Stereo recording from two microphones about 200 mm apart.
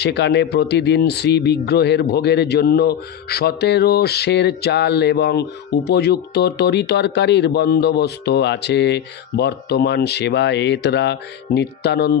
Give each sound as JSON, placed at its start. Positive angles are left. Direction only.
{"t": 0.0, "sound": "speech", "side_deg": 60}